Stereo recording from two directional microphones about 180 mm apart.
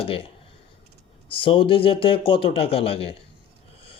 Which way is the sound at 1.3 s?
30° left (ahead or behind).